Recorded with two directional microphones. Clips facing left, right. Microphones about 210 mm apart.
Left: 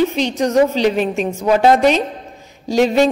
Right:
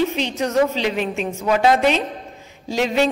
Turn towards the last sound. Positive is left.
turn(degrees=45)  # may be behind; listen again after turning